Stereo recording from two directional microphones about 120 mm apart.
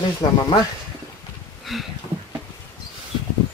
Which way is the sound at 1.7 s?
Centre (ahead or behind).